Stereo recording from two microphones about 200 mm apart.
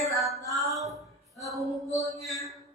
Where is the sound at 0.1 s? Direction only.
Centre (ahead or behind).